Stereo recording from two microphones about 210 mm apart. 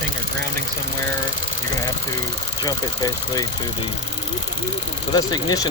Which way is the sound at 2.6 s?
20° left (ahead or behind).